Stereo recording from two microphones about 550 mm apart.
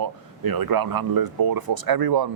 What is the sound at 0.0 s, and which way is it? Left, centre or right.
Speech, right.